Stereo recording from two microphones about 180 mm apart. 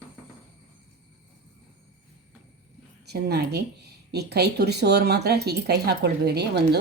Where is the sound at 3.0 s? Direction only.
65° right (ahead or behind).